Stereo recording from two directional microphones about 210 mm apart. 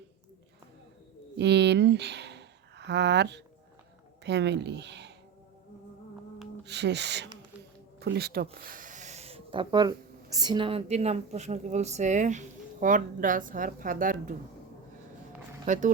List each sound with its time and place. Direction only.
1.4 s speech: 55° right (ahead or behind)
6.7 s speech: 55° right (ahead or behind)
8.6 s a sound: 40° right (ahead or behind); by 9.9 s 20° right (ahead or behind)
10.3 s a woman's voice: 20° right (ahead or behind); by 14.3 s 40° right (ahead or behind)
15.6 s speech: 35° right (ahead or behind)